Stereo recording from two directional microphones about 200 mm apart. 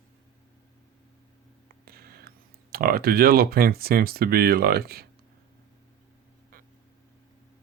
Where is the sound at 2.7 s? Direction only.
50° right (ahead or behind).